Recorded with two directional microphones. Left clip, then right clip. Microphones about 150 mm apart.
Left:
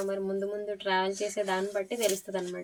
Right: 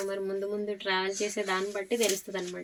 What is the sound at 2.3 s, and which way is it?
Speech, 20° left (ahead or behind).